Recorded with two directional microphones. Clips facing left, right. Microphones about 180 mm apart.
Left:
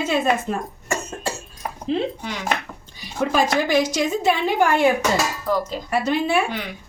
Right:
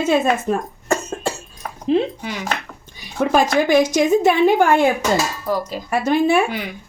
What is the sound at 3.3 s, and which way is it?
Speech, 50° right (ahead or behind).